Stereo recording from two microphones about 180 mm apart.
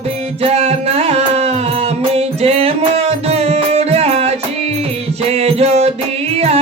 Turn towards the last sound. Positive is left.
turn(degrees=-35)  # may be behind; listen again after turning